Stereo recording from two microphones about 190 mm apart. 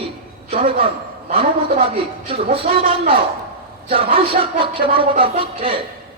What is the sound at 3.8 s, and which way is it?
Speech, 30° right (ahead or behind).